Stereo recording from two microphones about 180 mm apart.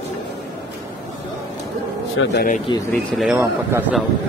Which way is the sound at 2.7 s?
25° left (ahead or behind).